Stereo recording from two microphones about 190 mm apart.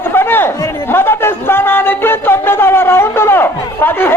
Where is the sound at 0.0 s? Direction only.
10° left (ahead or behind).